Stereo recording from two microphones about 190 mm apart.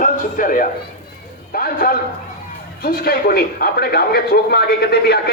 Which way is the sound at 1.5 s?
50° left (ahead or behind).